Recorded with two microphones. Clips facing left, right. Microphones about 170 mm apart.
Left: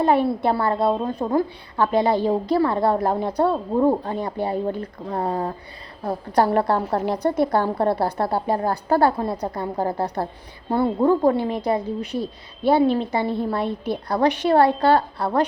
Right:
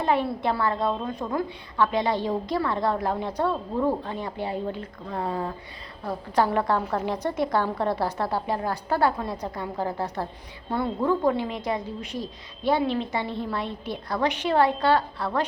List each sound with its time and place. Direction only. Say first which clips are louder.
0.0 s a woman's voice: left 5 dB; 40° left (ahead or behind)